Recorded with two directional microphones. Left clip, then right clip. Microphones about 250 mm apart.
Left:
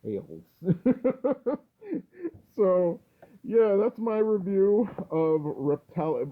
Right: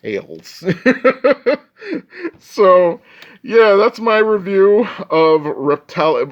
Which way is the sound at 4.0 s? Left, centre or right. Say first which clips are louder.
Right 13 dB; centre.